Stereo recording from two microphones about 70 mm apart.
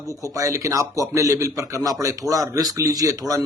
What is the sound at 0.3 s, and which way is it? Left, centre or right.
A man's voice, right.